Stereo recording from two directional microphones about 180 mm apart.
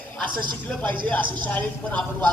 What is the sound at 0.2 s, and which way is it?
Speech, 25° right (ahead or behind).